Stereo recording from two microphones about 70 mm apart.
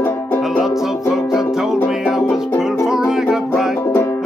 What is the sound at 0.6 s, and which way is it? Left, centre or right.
Music, centre.